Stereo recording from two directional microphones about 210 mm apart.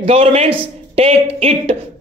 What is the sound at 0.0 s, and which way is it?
Speech, 30° right (ahead or behind).